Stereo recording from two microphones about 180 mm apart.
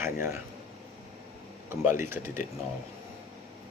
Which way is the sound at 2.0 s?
15° right (ahead or behind).